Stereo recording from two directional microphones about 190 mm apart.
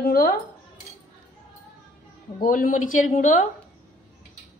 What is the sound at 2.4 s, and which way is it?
A woman's voice, 50° left (ahead or behind).